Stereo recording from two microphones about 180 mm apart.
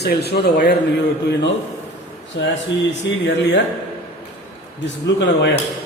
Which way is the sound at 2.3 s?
70° left (ahead or behind).